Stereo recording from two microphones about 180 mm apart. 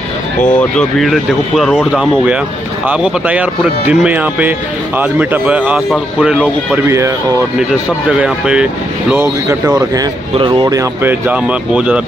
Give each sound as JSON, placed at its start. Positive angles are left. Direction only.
{"t": 0.6, "sound": "speech", "side_deg": 5}
{"t": 8.1, "sound": "speech", "side_deg": -5}